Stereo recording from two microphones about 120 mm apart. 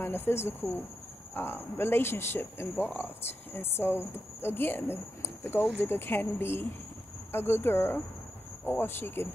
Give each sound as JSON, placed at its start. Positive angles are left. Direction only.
{"t": 0.0, "sound": "speech", "side_deg": 20}